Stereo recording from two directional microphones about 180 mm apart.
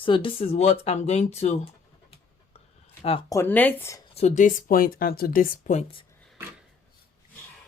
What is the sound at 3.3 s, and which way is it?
Speech, 10° left (ahead or behind).